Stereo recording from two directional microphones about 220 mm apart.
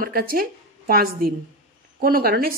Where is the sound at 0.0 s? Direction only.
40° right (ahead or behind).